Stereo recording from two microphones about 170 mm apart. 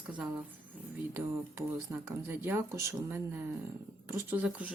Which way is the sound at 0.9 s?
15° right (ahead or behind).